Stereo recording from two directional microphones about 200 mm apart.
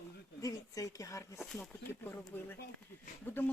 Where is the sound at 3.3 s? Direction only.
10° left (ahead or behind).